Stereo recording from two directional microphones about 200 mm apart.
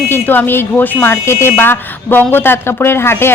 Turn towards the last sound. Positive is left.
turn(degrees=10)  # may be behind; listen again after turning